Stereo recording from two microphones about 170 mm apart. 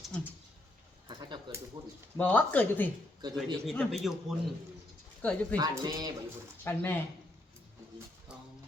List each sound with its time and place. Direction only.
0.1 s speech: 5° left (ahead or behind)
1.0 s a sound: 25° right (ahead or behind)
2.1 s speech: 10° left (ahead or behind)
5.5 s speech: 25° right (ahead or behind)
6.7 s speech: 15° left (ahead or behind)